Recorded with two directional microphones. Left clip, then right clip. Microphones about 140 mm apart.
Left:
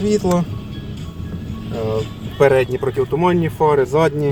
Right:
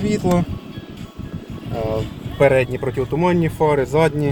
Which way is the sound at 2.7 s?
Centre (ahead or behind).